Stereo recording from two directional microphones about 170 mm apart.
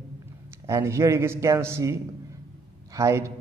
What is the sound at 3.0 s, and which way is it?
Speech, 15° right (ahead or behind).